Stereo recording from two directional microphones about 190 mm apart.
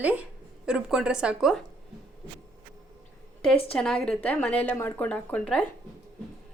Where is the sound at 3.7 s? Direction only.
5° left (ahead or behind).